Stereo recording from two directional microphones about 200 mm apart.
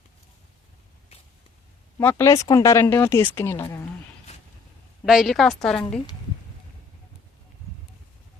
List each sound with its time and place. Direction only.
1.1 s a sound: 30° left (ahead or behind)
2.0 s speech: 10° left (ahead or behind)
5.0 s a woman's voice: centre (ahead or behind)